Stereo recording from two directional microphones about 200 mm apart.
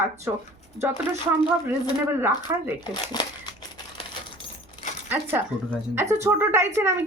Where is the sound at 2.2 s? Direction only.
10° right (ahead or behind).